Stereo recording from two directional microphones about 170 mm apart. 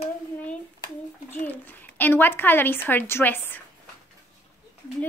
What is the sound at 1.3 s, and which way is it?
Speech, 10° left (ahead or behind).